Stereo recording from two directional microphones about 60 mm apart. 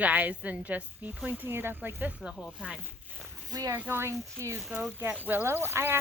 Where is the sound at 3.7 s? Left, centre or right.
Right.